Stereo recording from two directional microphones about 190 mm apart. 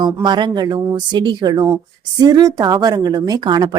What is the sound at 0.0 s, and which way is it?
Speech, 25° right (ahead or behind).